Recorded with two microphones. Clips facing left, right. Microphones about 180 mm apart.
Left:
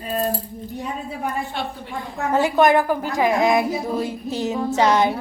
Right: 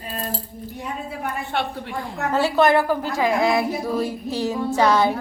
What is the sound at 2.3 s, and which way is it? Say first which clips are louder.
A woman's voice: left 1 dB; 15° left (ahead or behind).